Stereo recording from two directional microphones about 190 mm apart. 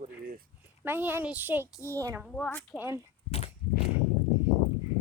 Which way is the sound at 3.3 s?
30° left (ahead or behind).